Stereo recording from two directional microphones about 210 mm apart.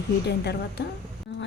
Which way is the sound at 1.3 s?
55° left (ahead or behind).